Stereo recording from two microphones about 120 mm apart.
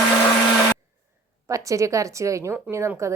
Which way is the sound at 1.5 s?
25° right (ahead or behind).